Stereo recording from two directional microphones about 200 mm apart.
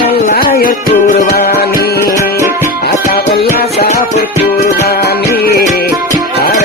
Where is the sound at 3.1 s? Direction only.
50° left (ahead or behind).